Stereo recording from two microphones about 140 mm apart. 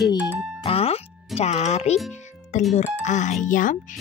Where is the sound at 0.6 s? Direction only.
45° left (ahead or behind).